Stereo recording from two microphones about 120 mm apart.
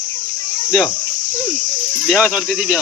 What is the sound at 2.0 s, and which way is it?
Speech, centre (ahead or behind).